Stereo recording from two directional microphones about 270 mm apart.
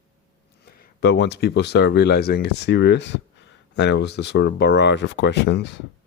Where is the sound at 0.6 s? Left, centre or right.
Left.